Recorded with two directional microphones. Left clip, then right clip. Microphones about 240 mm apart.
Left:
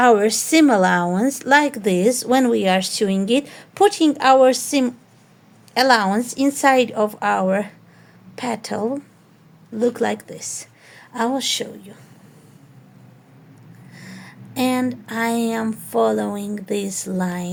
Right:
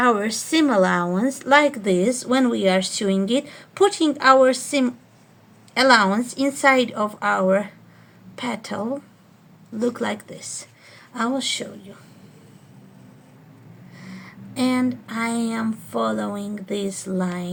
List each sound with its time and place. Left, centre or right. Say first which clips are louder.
0.0 s a woman's voice: left 5 dB; left
13.9 s speech: left 2 dB; left